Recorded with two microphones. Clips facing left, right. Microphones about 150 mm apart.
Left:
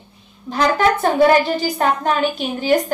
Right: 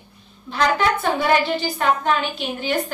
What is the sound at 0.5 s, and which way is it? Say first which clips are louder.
A woman's voice: left 3 dB; 40° left (ahead or behind).